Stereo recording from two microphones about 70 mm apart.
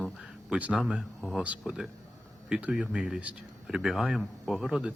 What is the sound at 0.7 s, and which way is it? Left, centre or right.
Speech, centre.